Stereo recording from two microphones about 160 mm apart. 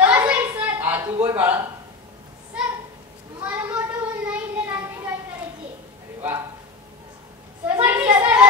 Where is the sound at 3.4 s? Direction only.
10° right (ahead or behind).